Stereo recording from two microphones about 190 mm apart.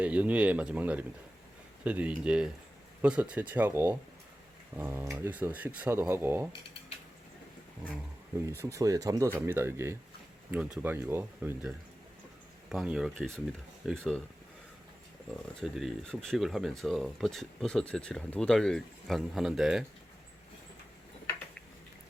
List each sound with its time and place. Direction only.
0.0 s speech: 10° right (ahead or behind)
8.5 s speech: 15° right (ahead or behind)
12.6 s speech: centre (ahead or behind)
15.6 s speech: centre (ahead or behind)